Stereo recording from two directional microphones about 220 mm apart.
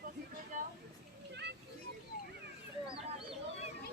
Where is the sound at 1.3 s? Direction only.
50° right (ahead or behind).